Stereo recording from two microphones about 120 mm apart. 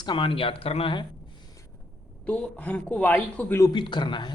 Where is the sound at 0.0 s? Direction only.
45° left (ahead or behind).